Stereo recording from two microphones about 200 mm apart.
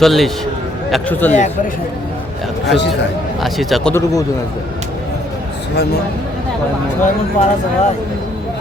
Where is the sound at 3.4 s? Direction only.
Centre (ahead or behind).